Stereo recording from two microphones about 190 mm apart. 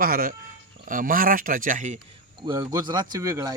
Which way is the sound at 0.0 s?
50° right (ahead or behind).